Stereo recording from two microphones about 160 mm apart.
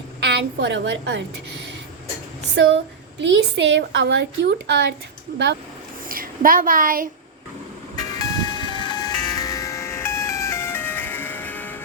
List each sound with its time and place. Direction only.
0.2 s a woman's voice: 90° right
3.2 s a woman's voice: 90° right
6.1 s a woman's voice: 60° right (ahead or behind)
7.9 s music: 25° left (ahead or behind)